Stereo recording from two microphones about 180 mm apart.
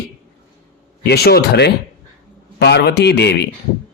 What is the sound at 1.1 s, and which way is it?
Speech, 60° left (ahead or behind).